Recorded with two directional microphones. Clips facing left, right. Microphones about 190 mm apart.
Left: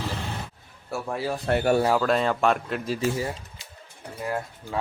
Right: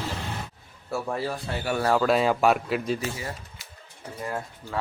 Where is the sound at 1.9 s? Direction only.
Centre (ahead or behind).